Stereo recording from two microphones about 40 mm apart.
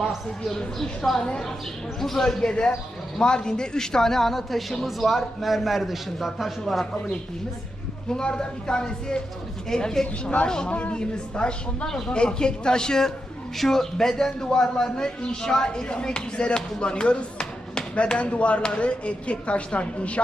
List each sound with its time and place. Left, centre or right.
0.5 s speech: centre
2.4 s a man's voice: left; by 6.8 s centre
8.1 s a man's voice: left
10.7 s a man's voice: left
11.9 s speech: centre
12.1 s a man's voice: left